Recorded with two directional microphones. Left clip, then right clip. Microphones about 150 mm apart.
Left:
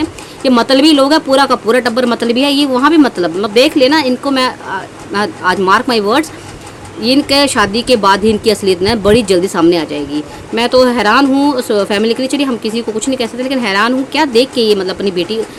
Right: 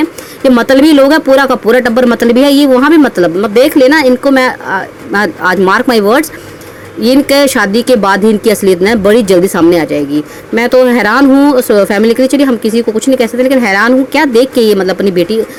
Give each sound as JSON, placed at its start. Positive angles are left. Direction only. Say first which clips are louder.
{"t": 0.0, "sound": "speech", "louder": "right 5 dB", "side_deg": -45}